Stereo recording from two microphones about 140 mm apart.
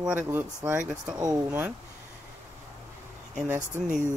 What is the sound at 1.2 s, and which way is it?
Speech, 20° right (ahead or behind).